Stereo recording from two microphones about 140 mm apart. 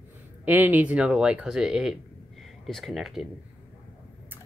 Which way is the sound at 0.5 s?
15° right (ahead or behind).